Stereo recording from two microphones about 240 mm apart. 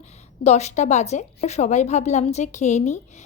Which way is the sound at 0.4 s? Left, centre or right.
Left.